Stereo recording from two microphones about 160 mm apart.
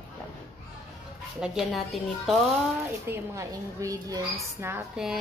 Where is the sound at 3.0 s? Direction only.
15° right (ahead or behind).